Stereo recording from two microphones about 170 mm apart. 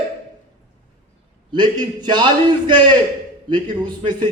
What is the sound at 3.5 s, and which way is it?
Speech, 25° right (ahead or behind).